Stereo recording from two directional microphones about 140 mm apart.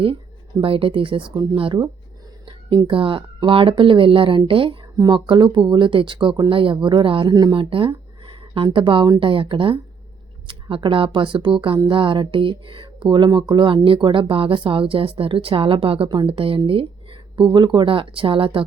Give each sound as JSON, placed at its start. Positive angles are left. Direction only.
{"t": 0.6, "sound": "speech", "side_deg": -40}